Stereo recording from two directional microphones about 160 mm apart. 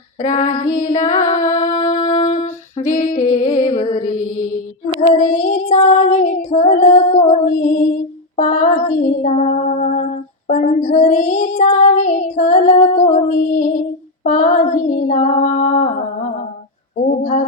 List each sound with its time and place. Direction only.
0.3 s female singing: 50° left (ahead or behind)
3.3 s music: 55° left (ahead or behind)
5.0 s child singing: 50° left (ahead or behind)
14.3 s female singing: 50° left (ahead or behind)